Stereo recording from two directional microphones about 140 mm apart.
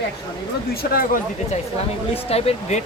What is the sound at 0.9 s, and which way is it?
Speech, 90° left.